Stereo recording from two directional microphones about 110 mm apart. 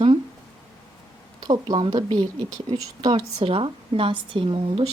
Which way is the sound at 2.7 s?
35° right (ahead or behind).